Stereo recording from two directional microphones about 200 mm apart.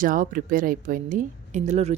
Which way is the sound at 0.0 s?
45° right (ahead or behind).